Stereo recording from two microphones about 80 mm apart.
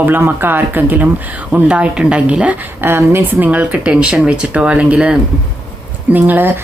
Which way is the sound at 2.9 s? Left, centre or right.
Right.